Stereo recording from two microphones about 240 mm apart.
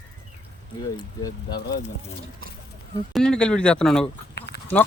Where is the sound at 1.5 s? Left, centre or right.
Left.